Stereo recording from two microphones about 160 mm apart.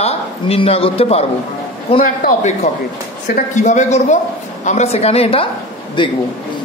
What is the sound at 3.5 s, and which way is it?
A man's voice, 50° left (ahead or behind).